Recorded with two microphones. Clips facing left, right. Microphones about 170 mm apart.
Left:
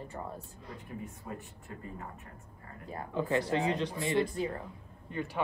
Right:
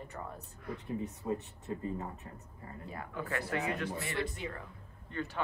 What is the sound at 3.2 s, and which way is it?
Speech, 20° left (ahead or behind).